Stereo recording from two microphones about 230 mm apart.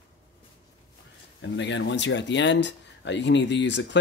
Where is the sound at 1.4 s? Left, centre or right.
Left.